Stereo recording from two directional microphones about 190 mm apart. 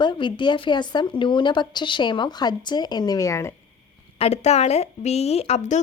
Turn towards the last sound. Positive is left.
turn(degrees=35)  # may be behind; listen again after turning